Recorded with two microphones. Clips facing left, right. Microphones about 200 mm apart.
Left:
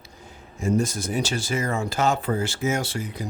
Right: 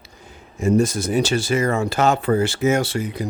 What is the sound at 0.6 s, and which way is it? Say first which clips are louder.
Speech: right 6 dB; 70° right (ahead or behind).